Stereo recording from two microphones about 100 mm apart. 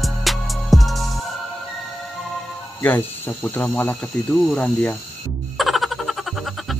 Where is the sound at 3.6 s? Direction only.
20° left (ahead or behind).